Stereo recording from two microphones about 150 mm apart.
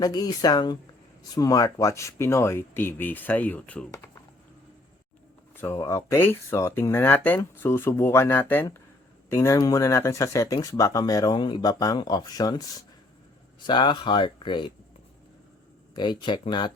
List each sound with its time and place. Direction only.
0.0 s speech: 25° left (ahead or behind); by 4.0 s 10° left (ahead or behind)
5.5 s speech: 20° left (ahead or behind)
16.0 s speech: 30° left (ahead or behind)